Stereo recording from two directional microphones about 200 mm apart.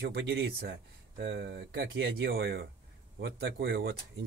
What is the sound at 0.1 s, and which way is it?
Speech, 60° right (ahead or behind).